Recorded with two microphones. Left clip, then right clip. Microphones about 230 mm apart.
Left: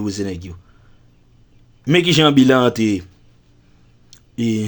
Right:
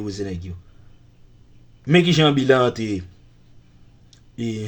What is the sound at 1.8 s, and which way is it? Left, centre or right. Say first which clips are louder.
A man's voice: left 3 dB; left.